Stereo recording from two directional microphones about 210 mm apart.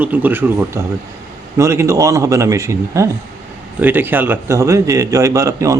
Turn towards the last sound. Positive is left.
turn(degrees=-15)  # may be behind; listen again after turning